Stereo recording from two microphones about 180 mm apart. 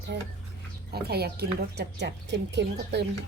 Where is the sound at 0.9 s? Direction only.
60° right (ahead or behind).